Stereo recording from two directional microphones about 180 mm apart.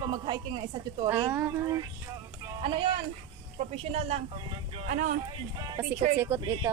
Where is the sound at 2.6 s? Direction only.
30° right (ahead or behind).